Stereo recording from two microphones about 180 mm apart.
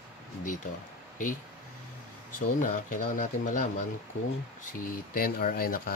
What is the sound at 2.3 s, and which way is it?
Speech, 50° left (ahead or behind).